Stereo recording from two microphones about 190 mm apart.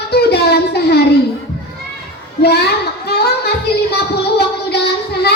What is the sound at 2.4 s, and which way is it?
Speech, 55° left (ahead or behind).